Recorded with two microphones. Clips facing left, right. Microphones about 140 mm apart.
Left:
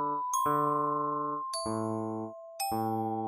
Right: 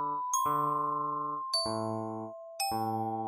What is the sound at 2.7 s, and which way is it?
Music, 60° left (ahead or behind).